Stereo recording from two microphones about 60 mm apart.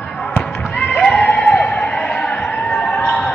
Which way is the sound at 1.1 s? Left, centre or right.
Left.